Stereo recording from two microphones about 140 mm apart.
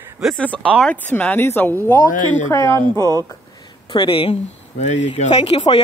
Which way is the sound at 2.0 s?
65° left (ahead or behind).